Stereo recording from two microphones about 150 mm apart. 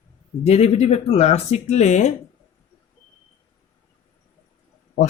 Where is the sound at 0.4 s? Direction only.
45° left (ahead or behind).